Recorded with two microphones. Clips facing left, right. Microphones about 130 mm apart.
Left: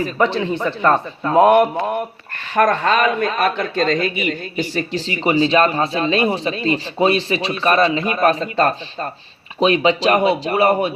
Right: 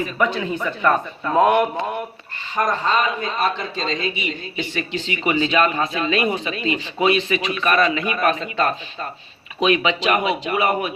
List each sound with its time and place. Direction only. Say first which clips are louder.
0.0 s a man's voice: left 3 dB; 30° left (ahead or behind)
2.6 s a man's voice: left 5 dB; 65° left (ahead or behind); by 10.9 s 30° left (ahead or behind)